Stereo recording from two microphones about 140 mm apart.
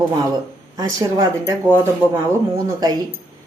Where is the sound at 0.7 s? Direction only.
25° right (ahead or behind).